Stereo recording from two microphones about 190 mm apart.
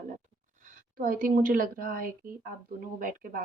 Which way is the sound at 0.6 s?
45° right (ahead or behind).